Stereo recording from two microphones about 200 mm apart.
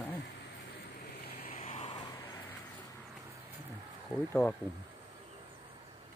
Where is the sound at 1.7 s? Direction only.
30° left (ahead or behind).